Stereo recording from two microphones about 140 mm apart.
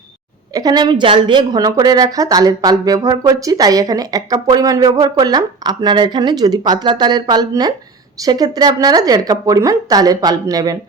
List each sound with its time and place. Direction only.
0.5 s a woman's voice: 30° right (ahead or behind)